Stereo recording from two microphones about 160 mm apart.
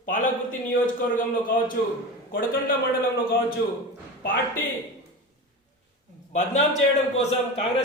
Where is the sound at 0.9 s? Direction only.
60° left (ahead or behind).